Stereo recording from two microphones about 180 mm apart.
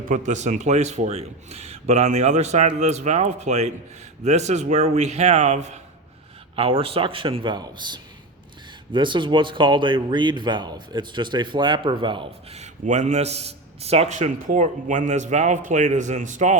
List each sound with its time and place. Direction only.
0.1 s a man's voice: 45° right (ahead or behind)